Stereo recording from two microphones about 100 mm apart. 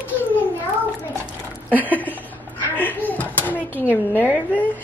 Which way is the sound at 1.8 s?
15° left (ahead or behind).